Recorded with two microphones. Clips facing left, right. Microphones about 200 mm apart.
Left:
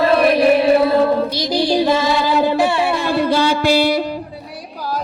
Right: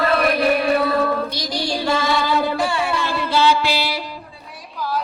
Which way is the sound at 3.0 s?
45° left (ahead or behind).